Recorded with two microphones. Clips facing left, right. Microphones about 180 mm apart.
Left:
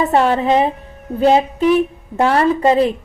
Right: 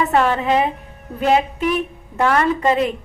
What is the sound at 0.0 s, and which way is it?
Speech, 30° left (ahead or behind).